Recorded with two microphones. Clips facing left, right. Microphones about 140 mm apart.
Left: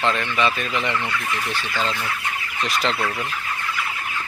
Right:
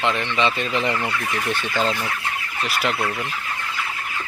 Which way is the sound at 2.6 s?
10° right (ahead or behind).